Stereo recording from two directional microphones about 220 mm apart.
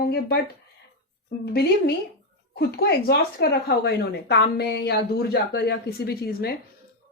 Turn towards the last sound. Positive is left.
turn(degrees=45)  # may be behind; listen again after turning